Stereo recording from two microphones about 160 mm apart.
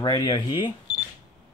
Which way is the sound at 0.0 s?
30° left (ahead or behind).